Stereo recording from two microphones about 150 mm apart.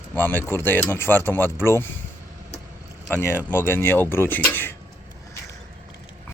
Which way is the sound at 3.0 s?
15° left (ahead or behind).